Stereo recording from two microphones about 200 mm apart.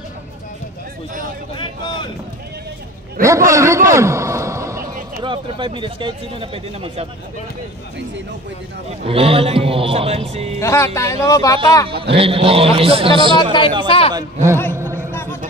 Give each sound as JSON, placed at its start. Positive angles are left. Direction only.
{"t": 1.6, "sound": "vehicle", "side_deg": 20}
{"t": 3.3, "sound": "a sound", "side_deg": -15}
{"t": 5.2, "sound": "speech", "side_deg": -25}
{"t": 9.0, "sound": "speech", "side_deg": -30}
{"t": 10.6, "sound": "speech", "side_deg": 15}
{"t": 12.2, "sound": "speech", "side_deg": -30}
{"t": 13.4, "sound": "a man's voice", "side_deg": 25}
{"t": 14.1, "sound": "a man's voice", "side_deg": -15}
{"t": 14.8, "sound": "a sound", "side_deg": -15}